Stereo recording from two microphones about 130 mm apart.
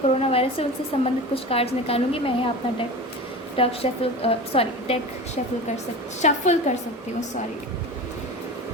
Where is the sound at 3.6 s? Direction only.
50° left (ahead or behind).